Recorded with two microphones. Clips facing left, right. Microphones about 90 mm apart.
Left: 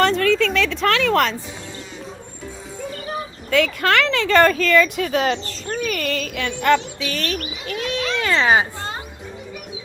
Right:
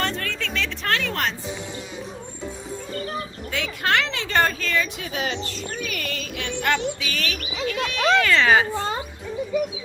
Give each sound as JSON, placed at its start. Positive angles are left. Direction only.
{"t": 0.0, "sound": "speech", "side_deg": 90}
{"t": 3.5, "sound": "speech", "side_deg": 65}
{"t": 8.2, "sound": "speech", "side_deg": 25}